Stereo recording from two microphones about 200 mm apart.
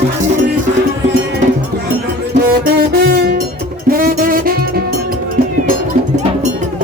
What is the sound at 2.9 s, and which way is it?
Music, 50° right (ahead or behind).